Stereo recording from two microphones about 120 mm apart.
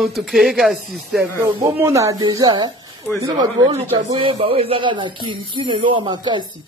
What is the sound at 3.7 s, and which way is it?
Speech, 55° right (ahead or behind).